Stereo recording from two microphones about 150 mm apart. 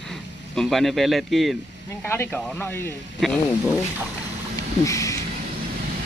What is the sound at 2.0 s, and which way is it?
Speech, 10° left (ahead or behind).